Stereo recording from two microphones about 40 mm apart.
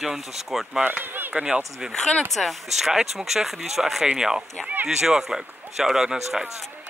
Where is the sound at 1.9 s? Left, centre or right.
Centre.